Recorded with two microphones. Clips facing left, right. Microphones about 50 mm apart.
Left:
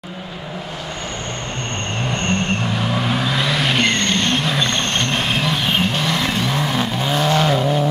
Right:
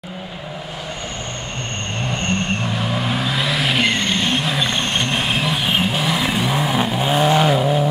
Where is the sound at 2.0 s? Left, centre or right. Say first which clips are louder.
Left 1 dB; centre.